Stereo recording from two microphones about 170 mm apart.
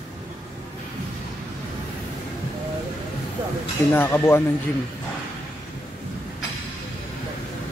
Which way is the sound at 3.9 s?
15° left (ahead or behind).